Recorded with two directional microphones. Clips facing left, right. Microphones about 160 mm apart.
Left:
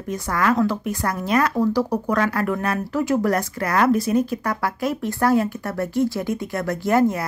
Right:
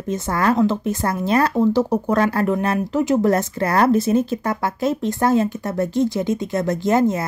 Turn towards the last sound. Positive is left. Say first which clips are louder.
# right 1 dB
turn(degrees=-20)  # may be behind; listen again after turning